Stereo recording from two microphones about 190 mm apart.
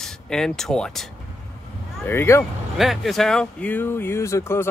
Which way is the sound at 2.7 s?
Centre (ahead or behind).